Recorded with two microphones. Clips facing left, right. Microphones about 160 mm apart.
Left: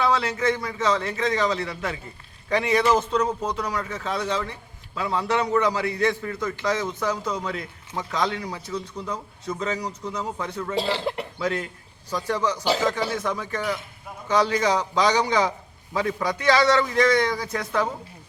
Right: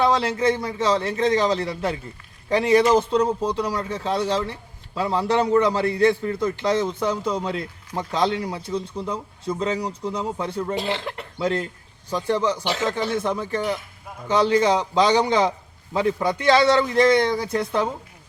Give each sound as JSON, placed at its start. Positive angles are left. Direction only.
{"t": 0.0, "sound": "a man's voice", "side_deg": -30}
{"t": 10.8, "sound": "speech", "side_deg": 35}
{"t": 11.3, "sound": "a man's voice", "side_deg": -30}